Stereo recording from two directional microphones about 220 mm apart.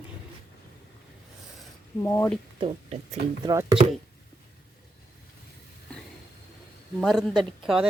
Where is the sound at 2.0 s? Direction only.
10° left (ahead or behind).